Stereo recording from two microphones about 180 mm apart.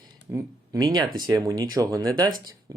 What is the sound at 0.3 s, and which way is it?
Speech, 20° right (ahead or behind).